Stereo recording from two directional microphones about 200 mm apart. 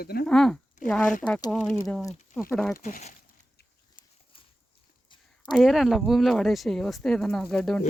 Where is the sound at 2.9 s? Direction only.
40° left (ahead or behind).